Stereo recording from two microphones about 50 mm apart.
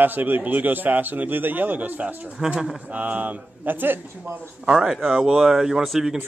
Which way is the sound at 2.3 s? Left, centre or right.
Centre.